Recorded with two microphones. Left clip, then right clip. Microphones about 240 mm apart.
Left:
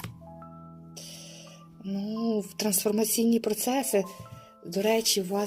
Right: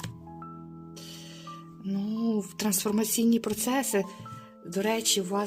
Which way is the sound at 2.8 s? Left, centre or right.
Right.